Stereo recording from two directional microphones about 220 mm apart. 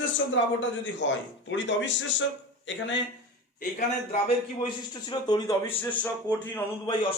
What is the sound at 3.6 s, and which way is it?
Speech, 35° left (ahead or behind).